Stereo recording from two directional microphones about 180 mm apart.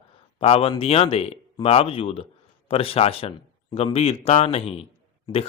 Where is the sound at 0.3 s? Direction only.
35° left (ahead or behind).